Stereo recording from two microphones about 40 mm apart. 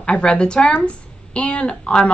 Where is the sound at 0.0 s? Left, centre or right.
Left.